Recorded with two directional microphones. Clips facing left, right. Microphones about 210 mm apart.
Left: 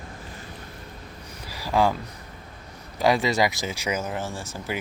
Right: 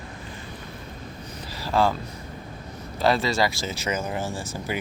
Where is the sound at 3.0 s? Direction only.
15° left (ahead or behind).